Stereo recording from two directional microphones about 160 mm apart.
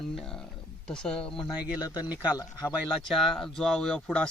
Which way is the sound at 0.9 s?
5° left (ahead or behind).